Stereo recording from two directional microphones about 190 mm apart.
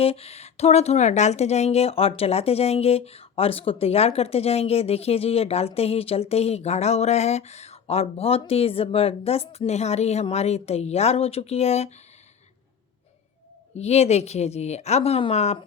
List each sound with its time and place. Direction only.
0.0 s speech: 30° left (ahead or behind)
13.7 s speech: 35° left (ahead or behind)